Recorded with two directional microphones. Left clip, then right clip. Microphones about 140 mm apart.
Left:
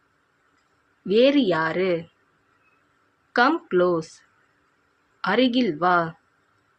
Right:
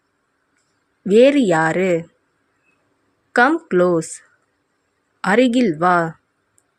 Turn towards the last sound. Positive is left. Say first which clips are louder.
# right 5 dB
turn(degrees=-60)  # may be behind; listen again after turning